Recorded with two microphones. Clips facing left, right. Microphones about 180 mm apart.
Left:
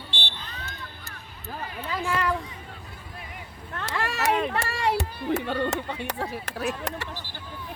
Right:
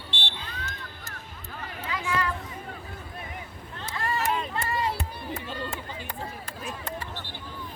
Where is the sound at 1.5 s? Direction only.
40° left (ahead or behind).